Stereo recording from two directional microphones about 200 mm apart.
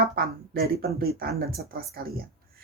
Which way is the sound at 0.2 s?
50° right (ahead or behind).